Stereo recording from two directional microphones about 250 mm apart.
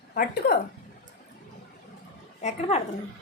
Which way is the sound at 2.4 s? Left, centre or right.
Left.